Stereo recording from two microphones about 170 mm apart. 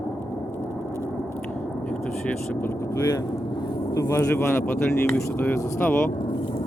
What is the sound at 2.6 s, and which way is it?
Speech, 20° left (ahead or behind).